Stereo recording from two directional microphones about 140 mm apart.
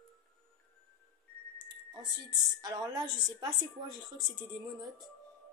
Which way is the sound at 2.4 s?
30° right (ahead or behind).